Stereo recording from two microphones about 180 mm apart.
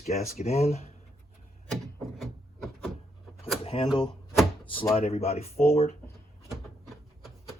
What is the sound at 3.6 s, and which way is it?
Shuffling cards, 35° left (ahead or behind).